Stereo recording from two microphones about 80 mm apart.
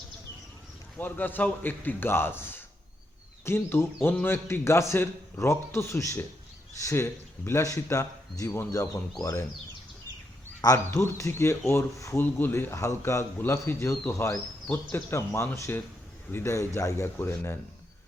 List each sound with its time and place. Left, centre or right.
0.9 s a man's voice: left
10.8 s a man's voice: left
12.1 s a man's voice: left
14.7 s a man's voice: left